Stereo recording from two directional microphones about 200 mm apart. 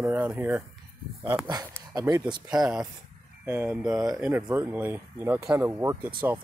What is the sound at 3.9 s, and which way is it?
Speech, 15° right (ahead or behind).